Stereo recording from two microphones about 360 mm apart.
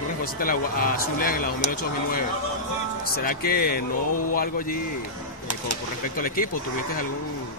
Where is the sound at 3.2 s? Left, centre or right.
Left.